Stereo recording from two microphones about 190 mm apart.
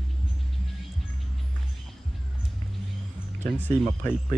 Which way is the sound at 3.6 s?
10° left (ahead or behind).